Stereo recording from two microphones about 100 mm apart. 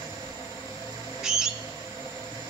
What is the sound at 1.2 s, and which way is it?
Bird, 5° right (ahead or behind).